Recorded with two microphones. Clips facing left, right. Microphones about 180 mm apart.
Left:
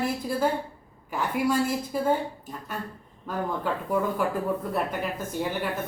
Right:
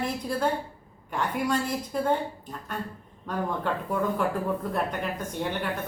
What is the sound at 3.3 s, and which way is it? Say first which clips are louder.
A man's voice: even; 5° left (ahead or behind).